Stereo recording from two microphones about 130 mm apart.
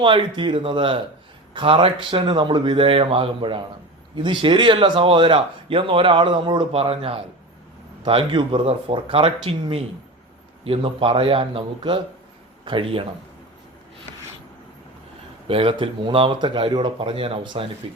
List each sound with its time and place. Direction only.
0.0 s a man's voice: 40° right (ahead or behind)
15.4 s speech: 45° right (ahead or behind)